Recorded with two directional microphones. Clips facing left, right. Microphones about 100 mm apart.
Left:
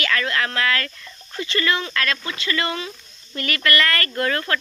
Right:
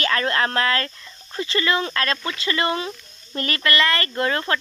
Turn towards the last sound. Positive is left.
turn(degrees=-25)  # may be behind; listen again after turning